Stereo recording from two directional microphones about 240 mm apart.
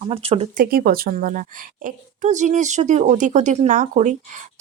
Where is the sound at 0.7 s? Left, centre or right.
Right.